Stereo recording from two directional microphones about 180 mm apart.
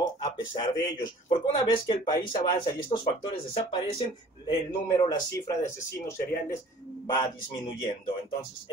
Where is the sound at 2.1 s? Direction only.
25° left (ahead or behind).